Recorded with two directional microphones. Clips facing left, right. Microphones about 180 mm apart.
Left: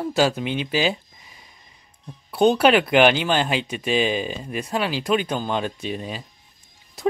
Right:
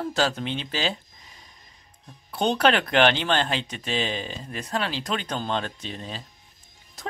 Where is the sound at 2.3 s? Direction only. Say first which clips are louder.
Left 6 dB; 10° left (ahead or behind).